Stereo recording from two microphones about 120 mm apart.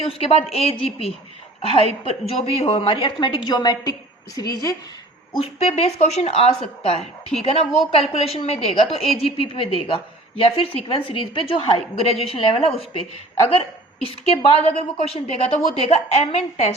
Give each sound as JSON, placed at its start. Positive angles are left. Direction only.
{"t": 0.0, "sound": "a woman's voice", "side_deg": 55}
{"t": 5.3, "sound": "a woman's voice", "side_deg": 55}